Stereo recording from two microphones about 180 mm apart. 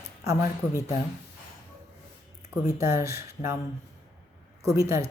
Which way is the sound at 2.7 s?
15° right (ahead or behind).